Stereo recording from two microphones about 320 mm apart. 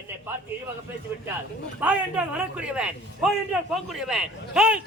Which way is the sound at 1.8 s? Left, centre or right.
Centre.